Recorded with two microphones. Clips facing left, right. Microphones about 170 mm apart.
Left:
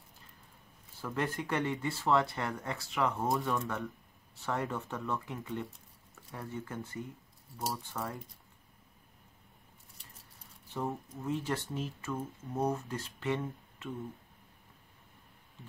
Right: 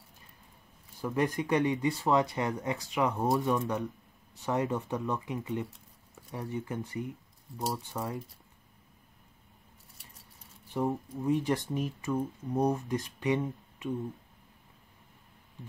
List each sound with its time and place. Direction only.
1.0 s speech: 15° right (ahead or behind)
10.7 s speech: 15° right (ahead or behind)